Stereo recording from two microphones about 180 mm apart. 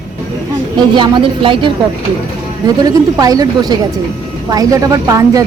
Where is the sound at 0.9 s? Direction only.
25° right (ahead or behind).